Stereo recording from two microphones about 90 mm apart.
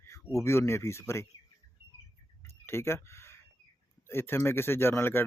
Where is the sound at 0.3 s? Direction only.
30° left (ahead or behind).